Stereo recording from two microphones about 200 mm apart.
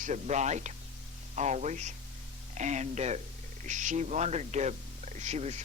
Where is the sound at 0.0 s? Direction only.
35° right (ahead or behind).